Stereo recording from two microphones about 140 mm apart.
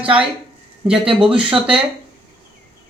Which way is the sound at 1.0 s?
40° right (ahead or behind).